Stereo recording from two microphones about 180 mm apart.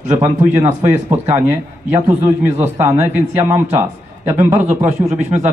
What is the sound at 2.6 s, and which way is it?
A man's voice, 15° right (ahead or behind).